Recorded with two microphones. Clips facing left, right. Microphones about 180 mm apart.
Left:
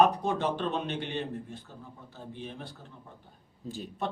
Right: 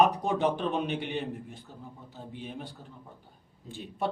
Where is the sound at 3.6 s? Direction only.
40° left (ahead or behind).